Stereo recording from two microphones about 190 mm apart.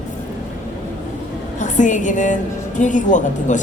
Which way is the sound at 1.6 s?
40° left (ahead or behind).